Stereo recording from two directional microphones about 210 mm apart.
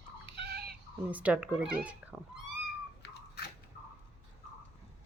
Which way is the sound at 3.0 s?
50° left (ahead or behind).